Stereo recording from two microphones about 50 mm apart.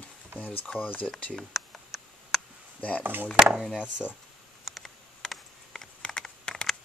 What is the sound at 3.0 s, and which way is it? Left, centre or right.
Speech, right.